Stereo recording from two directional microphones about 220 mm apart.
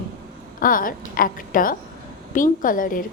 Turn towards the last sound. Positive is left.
turn(degrees=40)  # may be behind; listen again after turning